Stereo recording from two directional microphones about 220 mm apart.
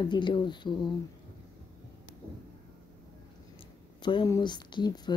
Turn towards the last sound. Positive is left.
turn(degrees=20)  # may be behind; listen again after turning